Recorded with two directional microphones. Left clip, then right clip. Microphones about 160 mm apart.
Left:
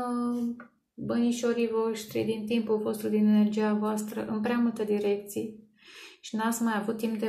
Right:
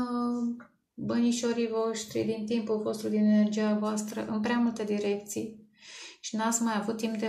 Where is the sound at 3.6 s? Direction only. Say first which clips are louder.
Left 1 dB; centre (ahead or behind).